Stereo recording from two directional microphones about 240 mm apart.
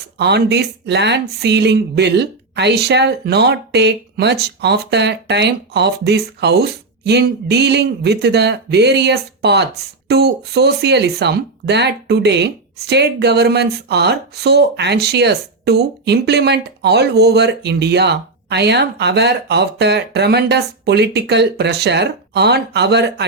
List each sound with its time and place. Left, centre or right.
0.2 s speech: right